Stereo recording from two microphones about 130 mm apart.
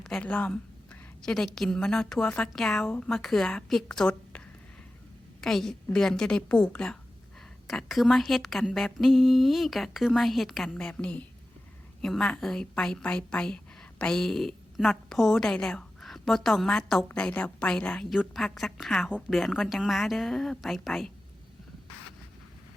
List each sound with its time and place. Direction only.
0.0 s a woman's voice: 5° left (ahead or behind)